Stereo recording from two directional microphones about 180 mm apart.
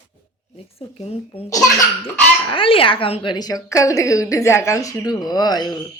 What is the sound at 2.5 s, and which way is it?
A woman's voice, 30° left (ahead or behind).